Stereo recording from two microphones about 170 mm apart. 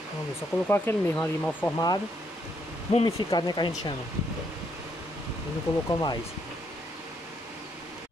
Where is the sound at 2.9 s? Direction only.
25° left (ahead or behind).